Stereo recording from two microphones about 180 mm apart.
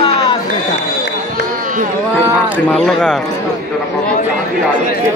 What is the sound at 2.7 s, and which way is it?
Speech, 5° left (ahead or behind).